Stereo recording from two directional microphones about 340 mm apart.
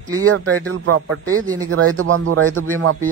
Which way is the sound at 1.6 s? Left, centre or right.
Right.